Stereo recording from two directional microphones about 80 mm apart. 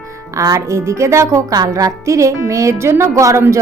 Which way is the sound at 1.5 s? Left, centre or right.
Right.